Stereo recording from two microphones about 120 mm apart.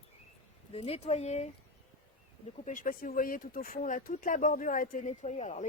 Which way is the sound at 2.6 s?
90° left.